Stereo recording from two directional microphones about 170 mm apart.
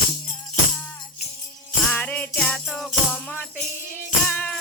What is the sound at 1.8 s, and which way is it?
Music, 10° left (ahead or behind).